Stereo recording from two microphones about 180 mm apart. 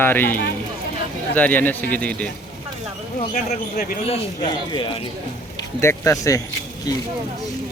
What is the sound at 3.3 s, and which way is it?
Speech, 45° left (ahead or behind).